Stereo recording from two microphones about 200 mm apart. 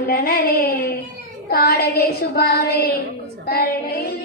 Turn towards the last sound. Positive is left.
turn(degrees=50)  # may be behind; listen again after turning